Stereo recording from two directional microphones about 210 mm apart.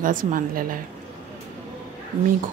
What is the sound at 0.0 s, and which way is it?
Speech, 40° right (ahead or behind).